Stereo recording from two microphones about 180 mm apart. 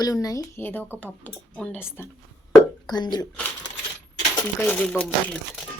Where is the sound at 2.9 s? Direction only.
25° left (ahead or behind).